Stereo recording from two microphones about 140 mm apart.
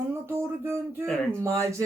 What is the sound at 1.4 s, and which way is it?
Speech, 20° right (ahead or behind).